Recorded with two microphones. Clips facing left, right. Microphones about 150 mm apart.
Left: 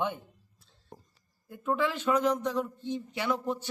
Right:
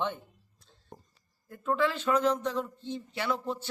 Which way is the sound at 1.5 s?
15° left (ahead or behind).